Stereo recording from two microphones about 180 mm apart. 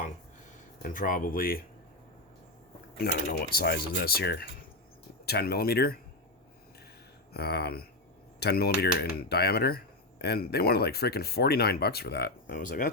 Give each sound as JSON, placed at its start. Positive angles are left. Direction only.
{"t": 0.8, "sound": "speech", "side_deg": 50}
{"t": 3.0, "sound": "speech", "side_deg": 60}
{"t": 7.3, "sound": "speech", "side_deg": 60}